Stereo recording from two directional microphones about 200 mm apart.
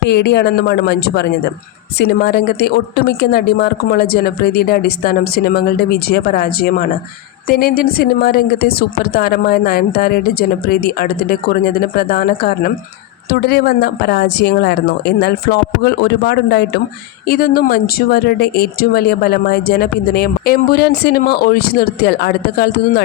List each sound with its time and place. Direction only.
0.0 s a man's voice: 55° left (ahead or behind)